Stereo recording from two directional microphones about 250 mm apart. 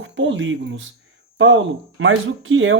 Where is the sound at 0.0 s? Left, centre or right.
Right.